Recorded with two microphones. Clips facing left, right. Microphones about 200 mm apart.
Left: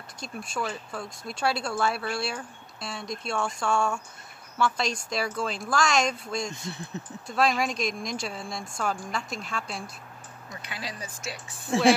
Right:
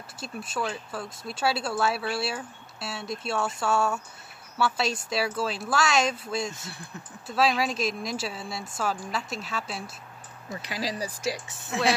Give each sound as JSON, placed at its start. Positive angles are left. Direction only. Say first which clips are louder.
{"t": 0.2, "sound": "speech", "louder": "right 1 dB", "side_deg": 0}
{"t": 6.7, "sound": "speech", "louder": "left 5 dB", "side_deg": 20}
{"t": 7.2, "sound": "speech", "louder": "right 1 dB", "side_deg": -5}
{"t": 10.5, "sound": "speech", "louder": "right 7 dB", "side_deg": -35}
{"t": 11.4, "sound": "speech", "louder": "left 6 dB", "side_deg": 30}